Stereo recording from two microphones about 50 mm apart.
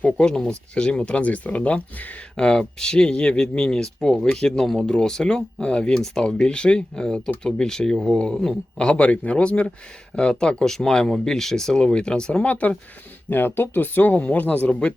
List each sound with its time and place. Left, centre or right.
0.3 s speech: centre; by 2.1 s left
2.3 s speech: centre
4.9 s speech: centre
8.8 s speech: centre
13.3 s speech: left